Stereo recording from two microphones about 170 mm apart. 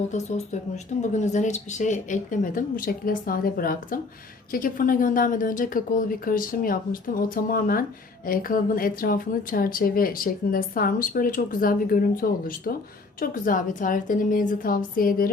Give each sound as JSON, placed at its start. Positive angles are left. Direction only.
{"t": 0.1, "sound": "a woman's voice", "side_deg": 40}